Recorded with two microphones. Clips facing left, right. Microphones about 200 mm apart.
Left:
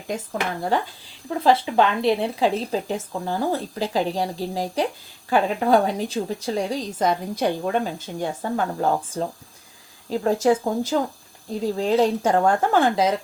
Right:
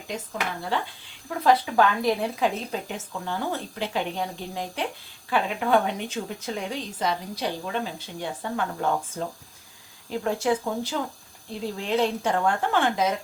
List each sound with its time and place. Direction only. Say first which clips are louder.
0.7 s speech: left 5 dB; 45° left (ahead or behind)
1.3 s a woman's voice: left 2 dB; 25° left (ahead or behind)